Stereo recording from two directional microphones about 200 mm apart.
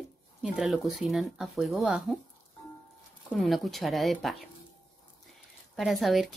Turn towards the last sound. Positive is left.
turn(degrees=0)  # may be behind; listen again after turning